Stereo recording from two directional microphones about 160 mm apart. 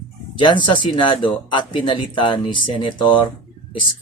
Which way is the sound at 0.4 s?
30° left (ahead or behind).